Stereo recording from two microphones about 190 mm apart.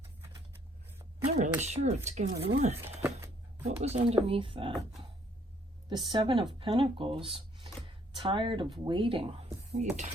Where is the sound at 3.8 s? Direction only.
35° right (ahead or behind).